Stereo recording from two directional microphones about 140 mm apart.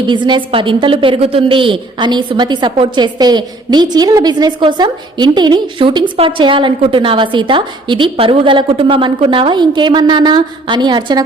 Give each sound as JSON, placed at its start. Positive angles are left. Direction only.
{"t": 0.1, "sound": "a woman's voice", "side_deg": -35}